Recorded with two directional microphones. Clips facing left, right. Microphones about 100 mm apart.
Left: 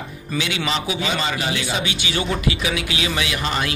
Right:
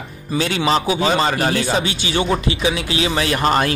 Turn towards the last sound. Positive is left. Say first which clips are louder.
# right 7 dB
turn(degrees=-45)  # may be behind; listen again after turning